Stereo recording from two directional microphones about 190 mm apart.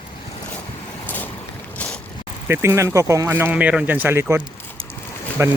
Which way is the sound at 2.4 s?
10° right (ahead or behind).